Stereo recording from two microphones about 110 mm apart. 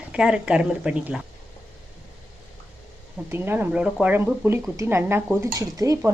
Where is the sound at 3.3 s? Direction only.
20° right (ahead or behind).